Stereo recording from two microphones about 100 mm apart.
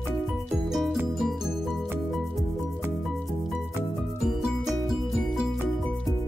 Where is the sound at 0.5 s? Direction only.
Centre (ahead or behind).